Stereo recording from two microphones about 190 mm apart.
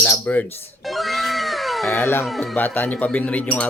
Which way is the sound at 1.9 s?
15° left (ahead or behind).